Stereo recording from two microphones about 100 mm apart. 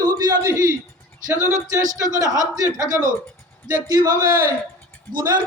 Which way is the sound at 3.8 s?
40° right (ahead or behind).